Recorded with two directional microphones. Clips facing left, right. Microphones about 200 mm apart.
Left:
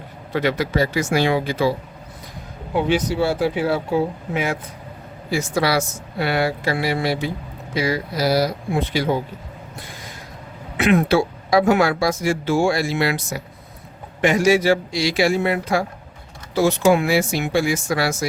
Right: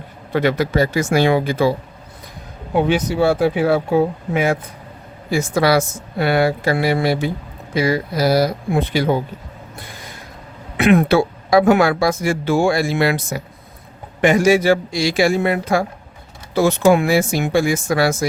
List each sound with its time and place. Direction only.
0.3 s speech: 55° right (ahead or behind)
3.2 s speech: 55° right (ahead or behind)
5.3 s speech: 50° right (ahead or behind)
10.8 s speech: 55° right (ahead or behind)